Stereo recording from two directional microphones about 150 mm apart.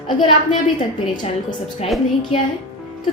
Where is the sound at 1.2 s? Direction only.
45° left (ahead or behind).